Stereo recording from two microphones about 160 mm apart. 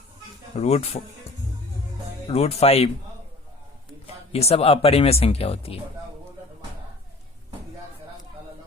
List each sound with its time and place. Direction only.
0.5 s speech: 40° left (ahead or behind)
2.2 s speech: 40° left (ahead or behind)
4.0 s speech: 40° left (ahead or behind)